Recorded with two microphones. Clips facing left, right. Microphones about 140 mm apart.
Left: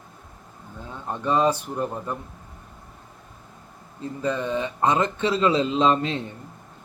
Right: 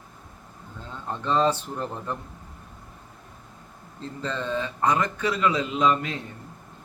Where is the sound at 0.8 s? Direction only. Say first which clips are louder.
Left 3 dB; 15° left (ahead or behind).